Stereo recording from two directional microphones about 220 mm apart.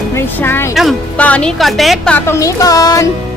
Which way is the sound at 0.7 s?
Centre (ahead or behind).